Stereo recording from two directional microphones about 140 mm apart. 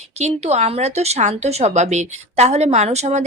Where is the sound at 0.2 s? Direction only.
50° right (ahead or behind).